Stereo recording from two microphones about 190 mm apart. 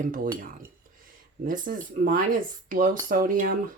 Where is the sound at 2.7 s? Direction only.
45° right (ahead or behind).